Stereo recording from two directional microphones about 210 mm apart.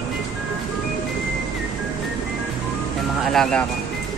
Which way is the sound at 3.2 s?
Centre (ahead or behind).